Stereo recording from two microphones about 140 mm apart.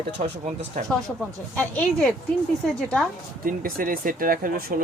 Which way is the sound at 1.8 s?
5° left (ahead or behind).